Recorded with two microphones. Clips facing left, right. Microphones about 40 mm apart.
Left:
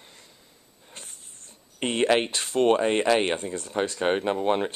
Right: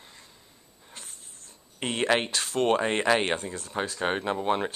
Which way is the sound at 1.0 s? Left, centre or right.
Left.